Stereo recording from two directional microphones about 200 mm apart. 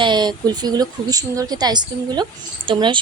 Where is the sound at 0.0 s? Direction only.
20° right (ahead or behind).